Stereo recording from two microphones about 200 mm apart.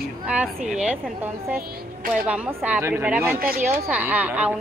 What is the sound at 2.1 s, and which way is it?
Speech, 5° right (ahead or behind).